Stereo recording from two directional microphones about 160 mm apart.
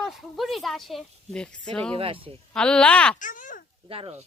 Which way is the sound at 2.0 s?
35° right (ahead or behind).